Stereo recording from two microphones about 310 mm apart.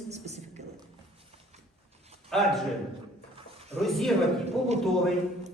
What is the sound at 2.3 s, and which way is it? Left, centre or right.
Speech, centre.